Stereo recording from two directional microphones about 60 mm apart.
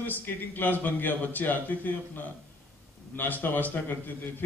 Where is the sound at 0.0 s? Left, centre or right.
Left.